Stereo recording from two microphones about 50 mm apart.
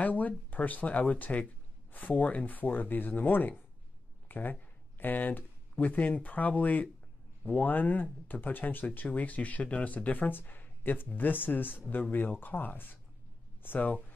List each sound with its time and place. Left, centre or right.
0.0 s speech: left